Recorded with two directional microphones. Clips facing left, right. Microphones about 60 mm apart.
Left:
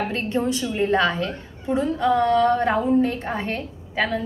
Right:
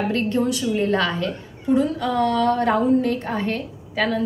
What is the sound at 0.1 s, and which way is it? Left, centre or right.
A woman's voice, left.